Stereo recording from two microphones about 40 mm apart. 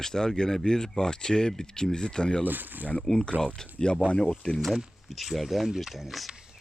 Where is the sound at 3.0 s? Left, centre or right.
Centre.